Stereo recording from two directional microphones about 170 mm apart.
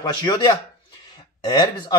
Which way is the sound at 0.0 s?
25° left (ahead or behind).